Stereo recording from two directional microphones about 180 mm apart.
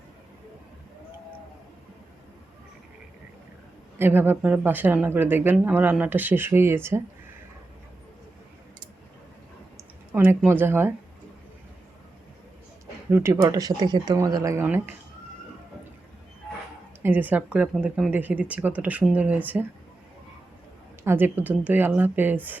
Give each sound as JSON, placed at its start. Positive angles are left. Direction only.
{"t": 3.9, "sound": "a woman's voice", "side_deg": -10}
{"t": 10.1, "sound": "a woman's voice", "side_deg": -10}
{"t": 13.1, "sound": "speech", "side_deg": -15}
{"t": 17.0, "sound": "a woman's voice", "side_deg": -10}
{"t": 21.0, "sound": "a woman's voice", "side_deg": -15}